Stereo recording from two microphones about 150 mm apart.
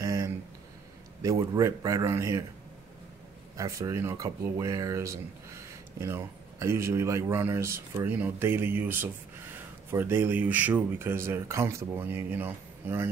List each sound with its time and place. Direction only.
0.0 s a sound: 25° right (ahead or behind)
1.2 s speech: 20° right (ahead or behind)
3.5 s speech: 20° right (ahead or behind)